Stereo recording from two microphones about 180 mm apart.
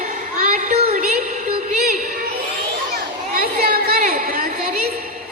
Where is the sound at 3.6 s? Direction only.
55° right (ahead or behind).